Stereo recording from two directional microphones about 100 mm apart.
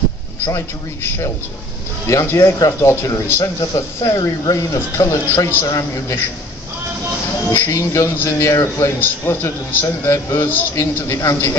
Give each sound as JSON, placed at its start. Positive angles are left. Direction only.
{"t": 0.5, "sound": "a man's voice", "side_deg": 30}
{"t": 7.5, "sound": "a man's voice", "side_deg": 25}